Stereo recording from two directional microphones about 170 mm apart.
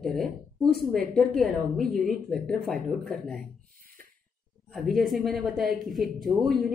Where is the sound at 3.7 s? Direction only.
55° right (ahead or behind).